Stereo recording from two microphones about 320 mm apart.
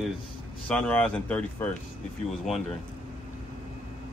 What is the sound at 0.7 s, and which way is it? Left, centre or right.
Speech, centre.